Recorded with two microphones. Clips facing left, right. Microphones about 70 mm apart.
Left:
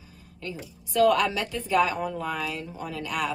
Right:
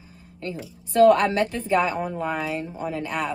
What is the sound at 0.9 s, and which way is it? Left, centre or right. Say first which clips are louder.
A woman's voice: right 5 dB; right.